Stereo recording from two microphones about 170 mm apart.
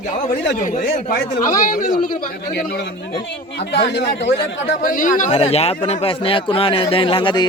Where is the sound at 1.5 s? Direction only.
55° left (ahead or behind).